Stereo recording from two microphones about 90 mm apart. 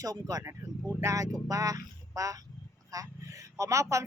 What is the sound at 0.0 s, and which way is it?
Speech, 40° right (ahead or behind).